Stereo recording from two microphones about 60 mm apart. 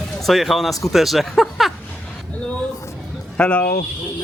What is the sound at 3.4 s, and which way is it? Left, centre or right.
Speech, left.